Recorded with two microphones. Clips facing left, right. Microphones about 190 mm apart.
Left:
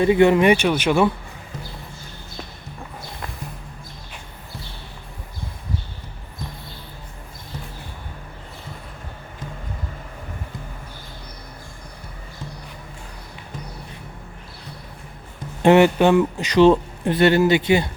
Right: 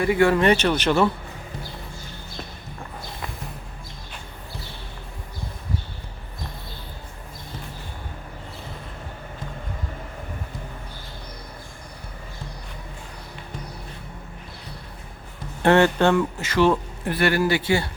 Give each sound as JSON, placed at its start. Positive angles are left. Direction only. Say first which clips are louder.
{"t": 0.0, "sound": "speech", "louder": "left 4 dB", "side_deg": 20}
{"t": 15.6, "sound": "a man's voice", "louder": "left 3 dB", "side_deg": 15}